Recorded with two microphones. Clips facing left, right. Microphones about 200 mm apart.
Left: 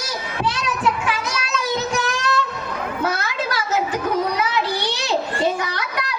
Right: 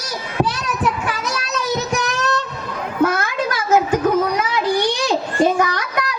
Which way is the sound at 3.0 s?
50° right (ahead or behind).